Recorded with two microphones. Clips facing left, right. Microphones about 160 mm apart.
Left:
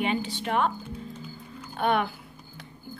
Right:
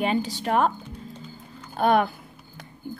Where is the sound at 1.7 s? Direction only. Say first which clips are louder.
Right 5 dB; 40° right (ahead or behind).